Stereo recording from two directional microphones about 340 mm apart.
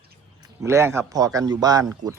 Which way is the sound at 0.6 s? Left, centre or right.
Centre.